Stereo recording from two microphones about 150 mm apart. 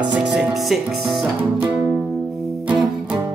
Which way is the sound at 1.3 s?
15° right (ahead or behind).